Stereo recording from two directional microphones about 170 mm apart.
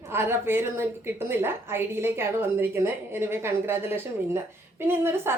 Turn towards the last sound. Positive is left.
turn(degrees=-15)  # may be behind; listen again after turning